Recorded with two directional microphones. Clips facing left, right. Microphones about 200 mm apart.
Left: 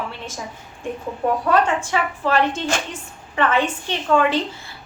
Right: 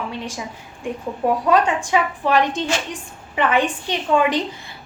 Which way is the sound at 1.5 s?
15° right (ahead or behind).